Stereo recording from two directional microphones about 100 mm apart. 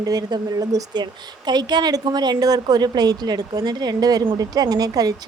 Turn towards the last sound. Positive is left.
turn(degrees=-40)  # may be behind; listen again after turning